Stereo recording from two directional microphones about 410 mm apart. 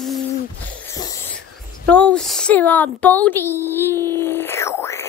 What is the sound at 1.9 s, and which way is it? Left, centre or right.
A child's voice, centre.